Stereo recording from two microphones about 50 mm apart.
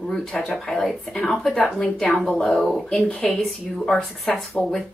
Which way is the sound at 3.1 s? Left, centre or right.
Centre.